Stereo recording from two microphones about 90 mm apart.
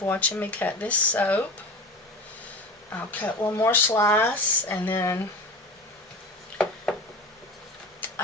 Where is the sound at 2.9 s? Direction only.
20° left (ahead or behind).